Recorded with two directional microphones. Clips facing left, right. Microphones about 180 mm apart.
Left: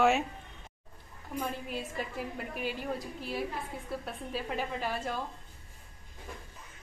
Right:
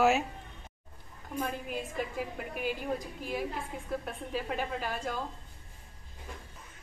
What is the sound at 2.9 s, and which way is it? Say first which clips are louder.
Speech: right 1 dB; 45° right (ahead or behind).